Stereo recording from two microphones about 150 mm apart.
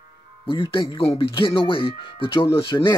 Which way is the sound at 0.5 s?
35° left (ahead or behind).